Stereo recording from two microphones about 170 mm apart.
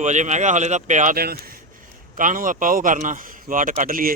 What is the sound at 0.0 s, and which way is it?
Speech, 45° right (ahead or behind).